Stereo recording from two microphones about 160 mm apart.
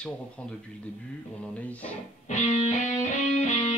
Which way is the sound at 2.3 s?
45° left (ahead or behind).